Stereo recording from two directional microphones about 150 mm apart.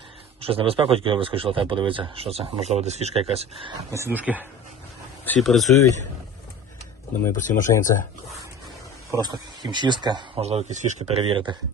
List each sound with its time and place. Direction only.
0.4 s speech: 40° right (ahead or behind)
3.9 s speech: 15° right (ahead or behind)
5.4 s speech: centre (ahead or behind)
7.3 s speech: 60° left (ahead or behind)
9.0 s speech: 25° right (ahead or behind)
10.4 s speech: 45° right (ahead or behind)
11.2 s speech: 35° right (ahead or behind)